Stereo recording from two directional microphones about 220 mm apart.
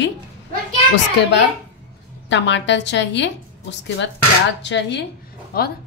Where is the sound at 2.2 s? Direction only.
55° left (ahead or behind).